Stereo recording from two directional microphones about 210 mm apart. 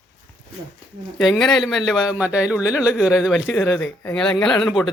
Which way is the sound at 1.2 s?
Centre (ahead or behind).